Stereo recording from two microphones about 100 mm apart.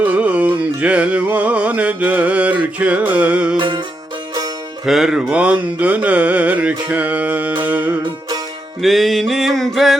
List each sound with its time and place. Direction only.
0.0 s music: 15° right (ahead or behind)
3.6 s music: 50° right (ahead or behind)
4.9 s music: 5° right (ahead or behind)
8.8 s music: centre (ahead or behind)